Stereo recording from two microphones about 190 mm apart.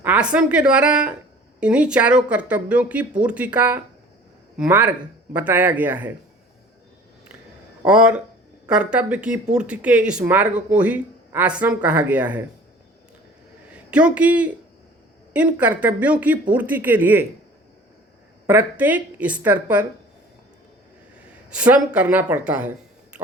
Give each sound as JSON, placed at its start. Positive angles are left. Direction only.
{"t": 0.0, "sound": "a woman's voice", "side_deg": -5}
{"t": 7.9, "sound": "a woman's voice", "side_deg": -5}
{"t": 13.7, "sound": "speech", "side_deg": -5}
{"t": 15.5, "sound": "speech", "side_deg": -10}
{"t": 18.4, "sound": "speech", "side_deg": -10}
{"t": 21.5, "sound": "speech", "side_deg": -5}